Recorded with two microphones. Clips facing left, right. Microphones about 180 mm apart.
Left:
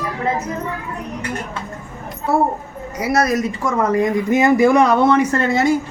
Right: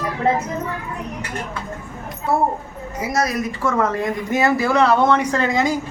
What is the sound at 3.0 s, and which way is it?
Speech, 65° left (ahead or behind).